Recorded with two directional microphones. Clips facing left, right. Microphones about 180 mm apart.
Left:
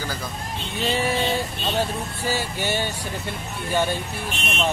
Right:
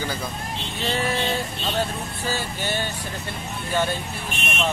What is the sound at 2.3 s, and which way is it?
Speech, 15° left (ahead or behind).